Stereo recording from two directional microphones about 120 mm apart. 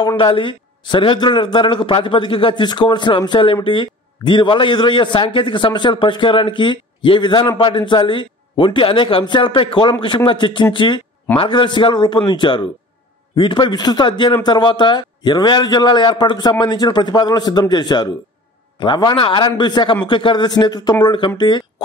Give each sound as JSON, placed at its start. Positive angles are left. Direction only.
{"t": 0.2, "sound": "a man's voice", "side_deg": 45}